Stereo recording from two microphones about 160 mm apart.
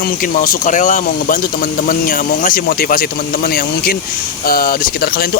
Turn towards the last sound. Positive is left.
turn(degrees=70)  # may be behind; listen again after turning